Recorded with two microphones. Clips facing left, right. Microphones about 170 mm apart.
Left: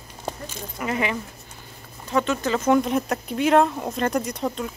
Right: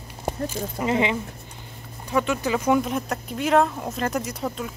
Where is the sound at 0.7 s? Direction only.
20° right (ahead or behind).